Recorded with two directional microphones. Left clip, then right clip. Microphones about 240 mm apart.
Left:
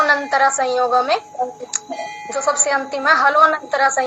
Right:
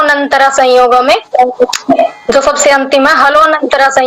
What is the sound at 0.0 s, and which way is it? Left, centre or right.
A woman's voice, right.